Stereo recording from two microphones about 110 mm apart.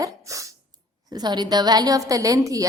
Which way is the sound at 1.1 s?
40° right (ahead or behind).